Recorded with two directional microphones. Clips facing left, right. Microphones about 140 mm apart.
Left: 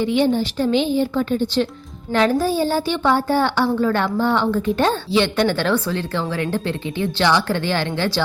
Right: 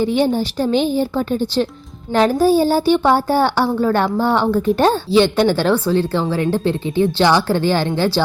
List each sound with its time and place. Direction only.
0.0 s a woman's voice: 40° right (ahead or behind)